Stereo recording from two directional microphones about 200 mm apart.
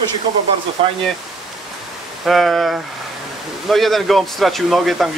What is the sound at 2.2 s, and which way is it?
Speech, centre (ahead or behind).